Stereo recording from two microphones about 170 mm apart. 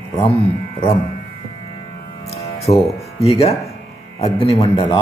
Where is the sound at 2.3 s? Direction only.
40° left (ahead or behind).